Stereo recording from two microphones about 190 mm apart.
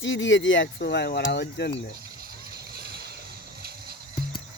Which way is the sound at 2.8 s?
55° right (ahead or behind).